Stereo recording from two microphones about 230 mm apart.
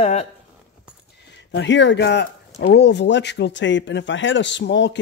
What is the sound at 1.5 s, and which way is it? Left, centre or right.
Speech, left.